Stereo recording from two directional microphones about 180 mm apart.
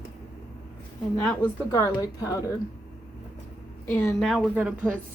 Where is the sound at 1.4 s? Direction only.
20° left (ahead or behind).